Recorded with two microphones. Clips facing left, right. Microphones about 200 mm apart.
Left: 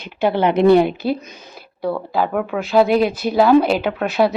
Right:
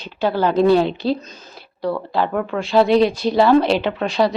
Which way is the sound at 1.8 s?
5° left (ahead or behind).